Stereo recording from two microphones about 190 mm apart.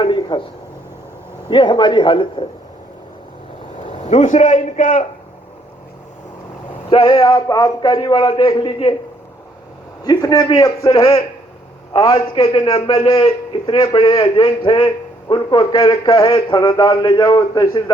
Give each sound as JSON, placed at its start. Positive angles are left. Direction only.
{"t": 0.0, "sound": "a sound", "side_deg": 25}
{"t": 1.5, "sound": "a man's voice", "side_deg": 25}
{"t": 3.8, "sound": "a man's voice", "side_deg": 35}
{"t": 6.9, "sound": "a man's voice", "side_deg": 25}
{"t": 10.0, "sound": "a man's voice", "side_deg": 20}